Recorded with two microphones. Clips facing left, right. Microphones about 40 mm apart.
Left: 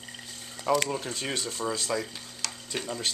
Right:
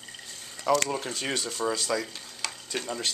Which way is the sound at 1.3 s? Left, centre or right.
Centre.